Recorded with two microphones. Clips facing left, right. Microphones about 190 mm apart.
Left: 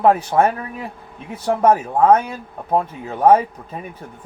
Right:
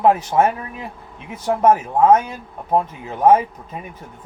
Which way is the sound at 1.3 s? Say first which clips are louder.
Even; 35° left (ahead or behind).